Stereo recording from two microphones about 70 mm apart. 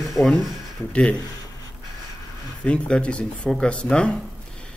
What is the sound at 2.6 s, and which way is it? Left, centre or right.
Speech, centre.